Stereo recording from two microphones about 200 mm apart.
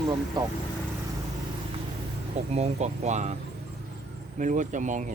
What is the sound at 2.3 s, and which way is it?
Speech, 30° right (ahead or behind).